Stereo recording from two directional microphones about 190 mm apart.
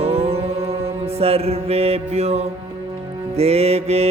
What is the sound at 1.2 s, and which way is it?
Mantra, 30° right (ahead or behind).